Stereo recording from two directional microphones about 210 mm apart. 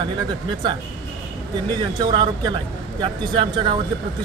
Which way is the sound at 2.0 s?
20° right (ahead or behind).